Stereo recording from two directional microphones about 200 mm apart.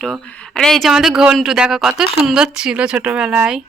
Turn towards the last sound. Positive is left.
turn(degrees=-5)  # may be behind; listen again after turning